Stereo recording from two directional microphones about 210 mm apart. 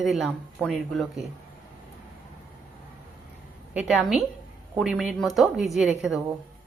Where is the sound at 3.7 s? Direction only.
5° right (ahead or behind).